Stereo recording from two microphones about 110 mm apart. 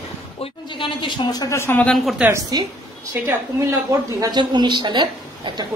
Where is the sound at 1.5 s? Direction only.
25° left (ahead or behind).